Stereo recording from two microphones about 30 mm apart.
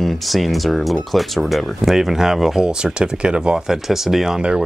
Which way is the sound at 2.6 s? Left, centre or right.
Right.